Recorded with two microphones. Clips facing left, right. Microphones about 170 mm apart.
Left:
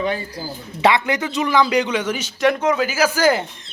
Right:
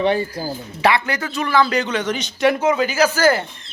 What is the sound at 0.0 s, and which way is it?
Speech, 30° right (ahead or behind).